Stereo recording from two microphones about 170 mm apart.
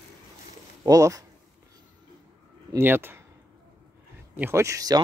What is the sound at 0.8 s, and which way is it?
Speech, 20° right (ahead or behind).